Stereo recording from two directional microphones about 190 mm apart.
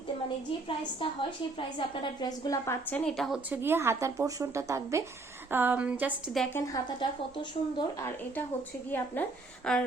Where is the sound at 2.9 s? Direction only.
Centre (ahead or behind).